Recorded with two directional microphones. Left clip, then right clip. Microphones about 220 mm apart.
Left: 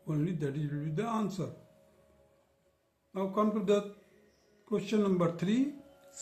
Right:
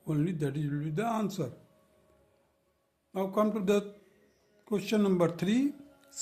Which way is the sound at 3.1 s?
55° right (ahead or behind).